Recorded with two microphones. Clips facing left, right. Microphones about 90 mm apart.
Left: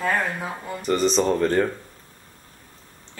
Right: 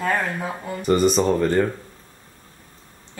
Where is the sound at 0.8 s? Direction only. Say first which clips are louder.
Right 3 dB; 10° right (ahead or behind).